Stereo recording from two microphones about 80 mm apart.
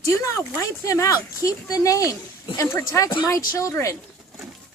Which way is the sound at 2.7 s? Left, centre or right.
Left.